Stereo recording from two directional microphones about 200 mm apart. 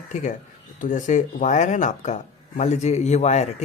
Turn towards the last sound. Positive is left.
turn(degrees=35)  # may be behind; listen again after turning